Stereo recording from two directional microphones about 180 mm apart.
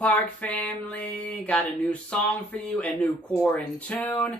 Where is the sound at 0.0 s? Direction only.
10° left (ahead or behind).